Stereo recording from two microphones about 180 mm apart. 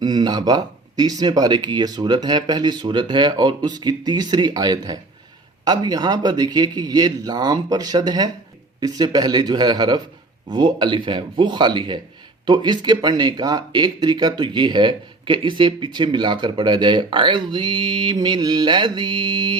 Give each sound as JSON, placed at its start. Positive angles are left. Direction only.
{"t": 0.0, "sound": "speech", "side_deg": -20}